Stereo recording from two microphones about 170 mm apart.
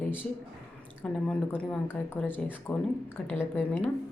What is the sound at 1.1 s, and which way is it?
A woman's voice, 5° left (ahead or behind).